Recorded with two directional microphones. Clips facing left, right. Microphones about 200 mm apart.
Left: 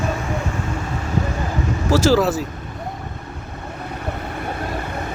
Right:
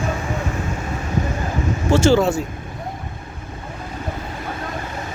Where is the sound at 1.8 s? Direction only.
Centre (ahead or behind).